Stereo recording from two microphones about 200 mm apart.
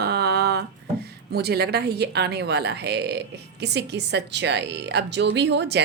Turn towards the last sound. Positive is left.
turn(degrees=-60)  # may be behind; listen again after turning